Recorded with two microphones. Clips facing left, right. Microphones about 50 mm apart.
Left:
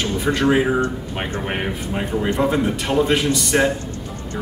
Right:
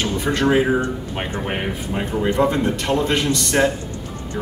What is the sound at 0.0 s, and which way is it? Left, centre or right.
A man's voice, centre.